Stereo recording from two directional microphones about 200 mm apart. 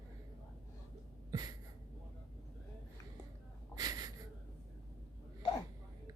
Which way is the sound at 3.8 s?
20° right (ahead or behind).